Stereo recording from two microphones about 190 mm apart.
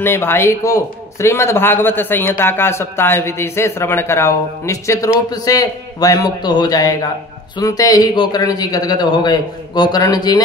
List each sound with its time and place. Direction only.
0.0 s a man's voice: 10° left (ahead or behind)